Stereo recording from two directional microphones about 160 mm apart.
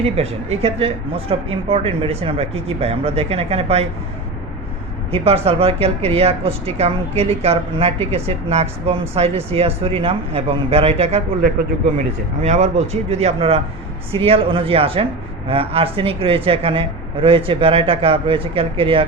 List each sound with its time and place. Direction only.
0.0 s speech: 40° right (ahead or behind)
5.1 s speech: 40° right (ahead or behind)
12.4 s a man's voice: 45° right (ahead or behind)